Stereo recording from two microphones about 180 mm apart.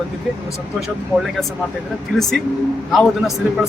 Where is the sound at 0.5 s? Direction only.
Centre (ahead or behind).